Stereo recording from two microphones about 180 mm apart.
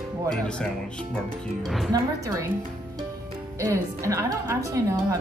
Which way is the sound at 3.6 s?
15° right (ahead or behind).